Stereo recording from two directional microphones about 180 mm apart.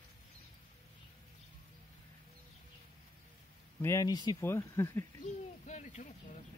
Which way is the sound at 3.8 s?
15° left (ahead or behind).